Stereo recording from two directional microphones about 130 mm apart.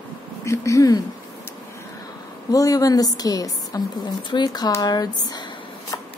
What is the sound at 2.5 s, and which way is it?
A woman's voice, 25° left (ahead or behind).